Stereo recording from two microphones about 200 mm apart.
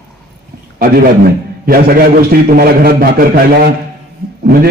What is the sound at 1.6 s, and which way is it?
A man's voice, 50° right (ahead or behind).